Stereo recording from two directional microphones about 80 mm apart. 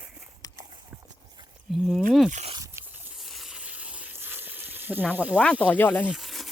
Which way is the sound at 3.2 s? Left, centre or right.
Centre.